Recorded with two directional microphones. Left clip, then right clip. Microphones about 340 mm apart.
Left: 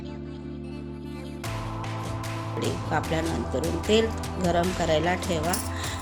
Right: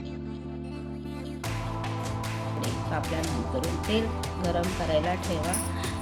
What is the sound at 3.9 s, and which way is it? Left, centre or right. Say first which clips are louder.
Speech: left 8 dB; left.